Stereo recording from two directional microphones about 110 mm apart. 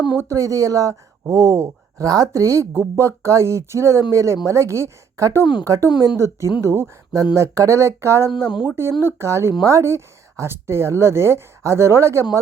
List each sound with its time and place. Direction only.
0.2 s speech: 30° right (ahead or behind)